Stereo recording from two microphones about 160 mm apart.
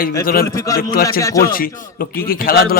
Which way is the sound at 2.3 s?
65° left (ahead or behind).